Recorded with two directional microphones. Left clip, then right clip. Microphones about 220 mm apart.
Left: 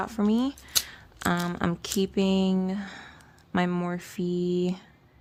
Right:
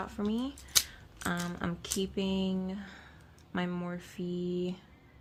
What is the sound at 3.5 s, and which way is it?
Speech, 55° left (ahead or behind).